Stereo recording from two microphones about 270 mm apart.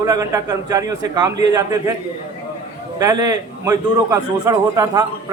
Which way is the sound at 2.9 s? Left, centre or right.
Centre.